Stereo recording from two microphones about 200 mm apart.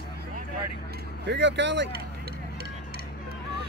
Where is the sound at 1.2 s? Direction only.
60° right (ahead or behind).